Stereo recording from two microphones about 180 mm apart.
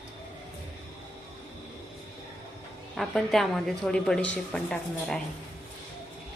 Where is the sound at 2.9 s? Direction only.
Centre (ahead or behind).